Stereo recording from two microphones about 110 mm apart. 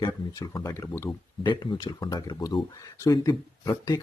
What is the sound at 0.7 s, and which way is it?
Speech, 25° left (ahead or behind).